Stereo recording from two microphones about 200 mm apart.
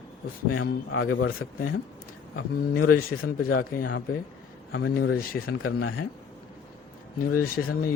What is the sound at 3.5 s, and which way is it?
Speech, 50° left (ahead or behind).